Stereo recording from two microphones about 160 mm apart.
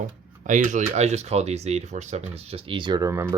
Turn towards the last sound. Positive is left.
turn(degrees=-15)  # may be behind; listen again after turning